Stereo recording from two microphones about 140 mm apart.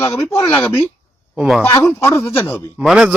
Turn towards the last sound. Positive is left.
turn(degrees=0)  # may be behind; listen again after turning